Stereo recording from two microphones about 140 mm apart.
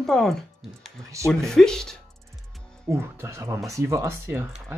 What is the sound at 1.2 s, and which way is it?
Speech, 20° right (ahead or behind).